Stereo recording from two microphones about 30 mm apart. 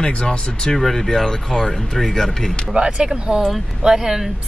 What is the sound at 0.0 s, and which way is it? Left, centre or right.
Speech, left.